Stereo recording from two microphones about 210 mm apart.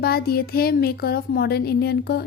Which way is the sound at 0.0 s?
45° left (ahead or behind).